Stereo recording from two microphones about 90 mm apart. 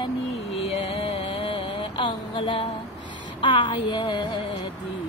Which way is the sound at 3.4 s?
60° left (ahead or behind).